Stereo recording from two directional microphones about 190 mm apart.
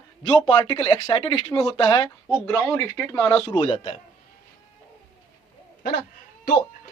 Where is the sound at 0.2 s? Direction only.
25° left (ahead or behind).